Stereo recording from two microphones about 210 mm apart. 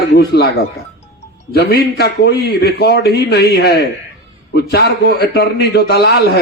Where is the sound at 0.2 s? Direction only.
50° left (ahead or behind).